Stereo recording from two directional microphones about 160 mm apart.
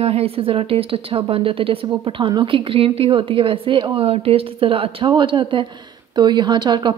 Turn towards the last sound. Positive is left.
turn(degrees=-30)  # may be behind; listen again after turning